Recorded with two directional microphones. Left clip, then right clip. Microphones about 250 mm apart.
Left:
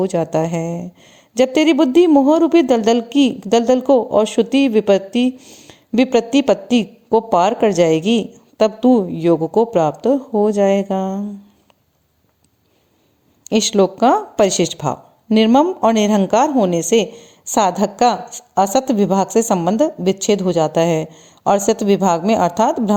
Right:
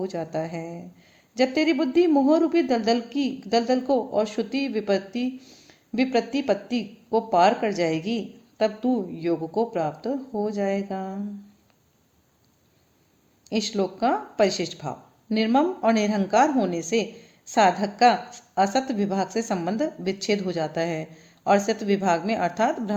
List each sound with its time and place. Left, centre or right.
0.0 s speech: left
13.5 s speech: left